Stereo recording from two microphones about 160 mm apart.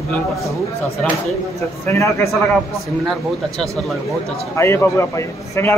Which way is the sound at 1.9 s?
20° left (ahead or behind).